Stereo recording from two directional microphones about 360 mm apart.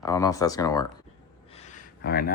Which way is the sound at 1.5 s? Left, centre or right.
Centre.